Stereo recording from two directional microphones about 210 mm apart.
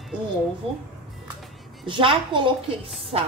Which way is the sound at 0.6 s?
25° right (ahead or behind).